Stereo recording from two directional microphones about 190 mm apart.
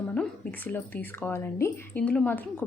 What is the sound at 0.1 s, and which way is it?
A woman's voice, 10° left (ahead or behind).